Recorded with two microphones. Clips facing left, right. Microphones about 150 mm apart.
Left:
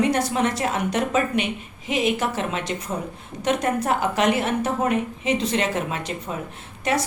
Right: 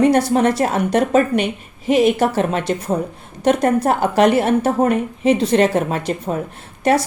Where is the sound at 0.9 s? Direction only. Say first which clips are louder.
Right 8 dB; 50° right (ahead or behind).